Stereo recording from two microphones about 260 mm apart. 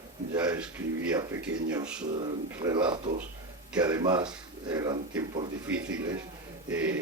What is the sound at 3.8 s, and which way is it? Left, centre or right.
Speech, centre.